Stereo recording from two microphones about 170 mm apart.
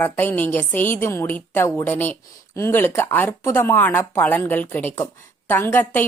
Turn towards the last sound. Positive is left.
turn(degrees=10)  # may be behind; listen again after turning